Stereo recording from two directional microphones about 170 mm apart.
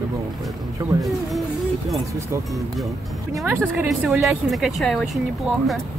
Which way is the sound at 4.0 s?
Centre (ahead or behind).